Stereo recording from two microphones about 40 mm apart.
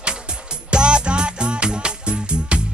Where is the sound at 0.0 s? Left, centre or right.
Right.